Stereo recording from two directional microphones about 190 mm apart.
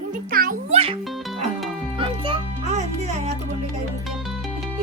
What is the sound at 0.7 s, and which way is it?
Speech, 30° right (ahead or behind).